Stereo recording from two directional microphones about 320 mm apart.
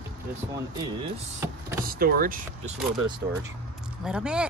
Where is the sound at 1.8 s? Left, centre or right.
Right.